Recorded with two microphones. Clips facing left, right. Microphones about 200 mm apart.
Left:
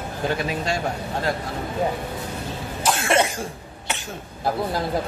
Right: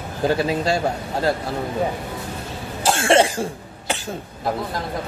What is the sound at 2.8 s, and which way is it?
Cough, 30° right (ahead or behind).